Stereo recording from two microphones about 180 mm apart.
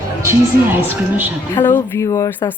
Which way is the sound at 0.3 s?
10° right (ahead or behind).